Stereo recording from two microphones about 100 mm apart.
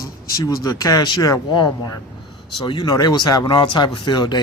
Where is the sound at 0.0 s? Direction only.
35° left (ahead or behind).